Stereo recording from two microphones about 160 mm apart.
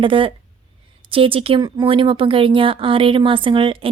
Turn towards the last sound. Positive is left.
turn(degrees=-30)  # may be behind; listen again after turning